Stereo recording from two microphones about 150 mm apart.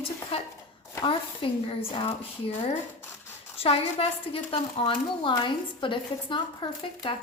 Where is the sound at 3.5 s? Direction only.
40° left (ahead or behind).